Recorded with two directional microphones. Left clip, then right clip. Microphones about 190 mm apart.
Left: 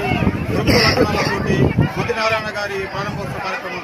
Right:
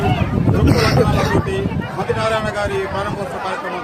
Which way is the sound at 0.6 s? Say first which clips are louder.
Left 2 dB; 5° right (ahead or behind).